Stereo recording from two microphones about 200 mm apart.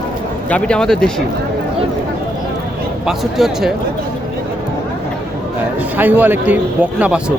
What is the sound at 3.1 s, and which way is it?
Speech, centre (ahead or behind).